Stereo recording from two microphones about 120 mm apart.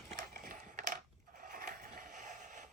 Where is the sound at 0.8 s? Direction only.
90° right.